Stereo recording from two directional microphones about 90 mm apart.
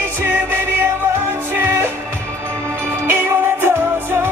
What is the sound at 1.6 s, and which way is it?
Music, 25° right (ahead or behind).